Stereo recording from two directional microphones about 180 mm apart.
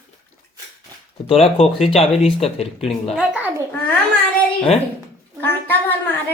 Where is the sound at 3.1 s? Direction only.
5° right (ahead or behind).